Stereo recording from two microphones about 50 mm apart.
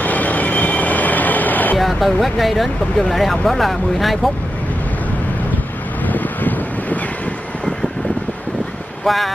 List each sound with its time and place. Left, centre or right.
0.0 s train: left
1.8 s speech: centre
6.0 s wind: left
9.0 s speech: centre